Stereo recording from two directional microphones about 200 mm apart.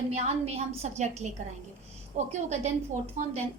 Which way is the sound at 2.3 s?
35° right (ahead or behind).